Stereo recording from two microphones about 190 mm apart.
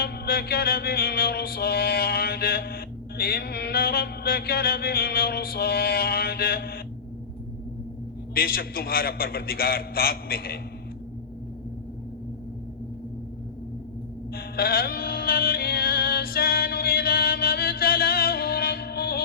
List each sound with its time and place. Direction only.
0.0 s music: 55° left (ahead or behind)
8.4 s music: 50° left (ahead or behind)
14.3 s music: 55° left (ahead or behind)